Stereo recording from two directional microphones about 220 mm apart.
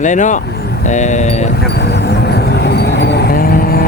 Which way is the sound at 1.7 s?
50° left (ahead or behind).